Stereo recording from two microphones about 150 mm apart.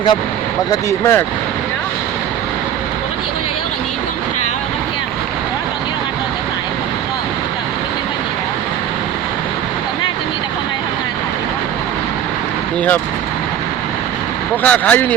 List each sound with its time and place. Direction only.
0.7 s speech: 20° left (ahead or behind)
14.6 s speech: 10° left (ahead or behind)